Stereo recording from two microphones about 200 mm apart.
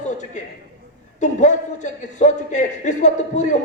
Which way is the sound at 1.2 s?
35° left (ahead or behind).